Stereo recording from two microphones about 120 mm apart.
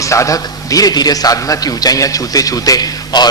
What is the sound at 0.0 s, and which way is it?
A man's voice, 25° left (ahead or behind).